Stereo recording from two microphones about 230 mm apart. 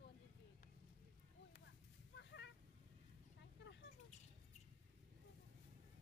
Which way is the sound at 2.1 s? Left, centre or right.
Left.